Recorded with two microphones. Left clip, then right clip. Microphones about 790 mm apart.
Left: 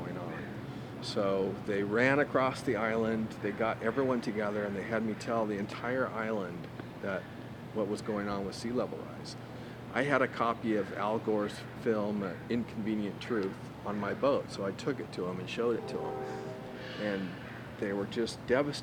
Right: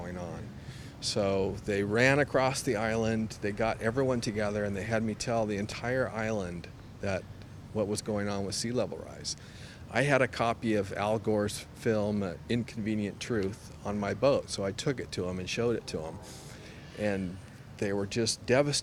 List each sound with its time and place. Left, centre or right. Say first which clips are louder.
1.0 s speech: right 2 dB; right
7.8 s speech: right 2 dB; right
9.9 s speech: right 3 dB; right
17.7 s speech: right 2 dB; right